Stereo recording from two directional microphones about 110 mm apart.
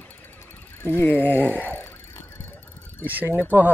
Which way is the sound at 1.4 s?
15° right (ahead or behind).